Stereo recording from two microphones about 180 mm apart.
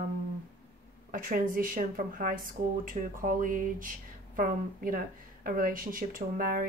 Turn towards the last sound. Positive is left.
turn(degrees=-50)  # may be behind; listen again after turning